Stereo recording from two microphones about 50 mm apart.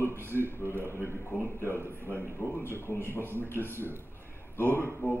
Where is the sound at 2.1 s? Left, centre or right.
Left.